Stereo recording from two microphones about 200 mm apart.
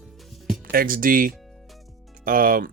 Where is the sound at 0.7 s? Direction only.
45° right (ahead or behind).